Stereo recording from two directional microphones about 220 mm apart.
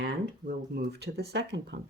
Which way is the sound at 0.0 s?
50° right (ahead or behind).